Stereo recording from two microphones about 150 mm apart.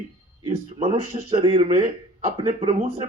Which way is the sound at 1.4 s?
35° right (ahead or behind).